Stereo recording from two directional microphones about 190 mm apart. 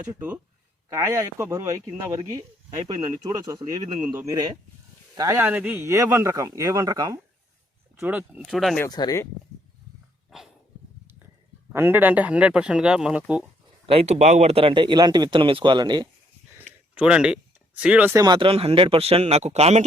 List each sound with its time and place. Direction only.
0.1 s speech: 10° right (ahead or behind)
7.9 s speech: 10° right (ahead or behind)
8.8 s speech: 20° left (ahead or behind)
10.2 s dog: centre (ahead or behind)
11.7 s speech: 10° right (ahead or behind)
13.9 s speech: 35° right (ahead or behind)
16.9 s speech: 5° right (ahead or behind); by 19.8 s 35° right (ahead or behind)